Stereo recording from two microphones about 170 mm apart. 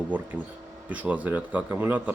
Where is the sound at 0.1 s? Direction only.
10° right (ahead or behind).